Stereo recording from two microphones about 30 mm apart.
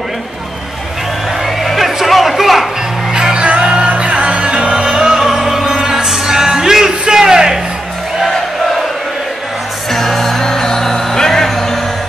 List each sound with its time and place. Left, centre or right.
1.6 s music: centre
2.0 s a sound: centre
3.3 s music: right
9.9 s music: centre